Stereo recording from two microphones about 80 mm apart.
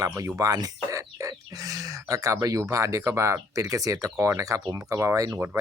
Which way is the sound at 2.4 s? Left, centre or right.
Right.